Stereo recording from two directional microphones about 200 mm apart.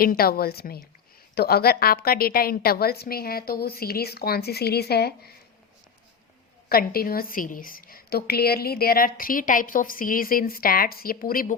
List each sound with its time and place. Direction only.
0.0 s a woman's voice: 50° left (ahead or behind)
6.7 s a woman's voice: 50° left (ahead or behind)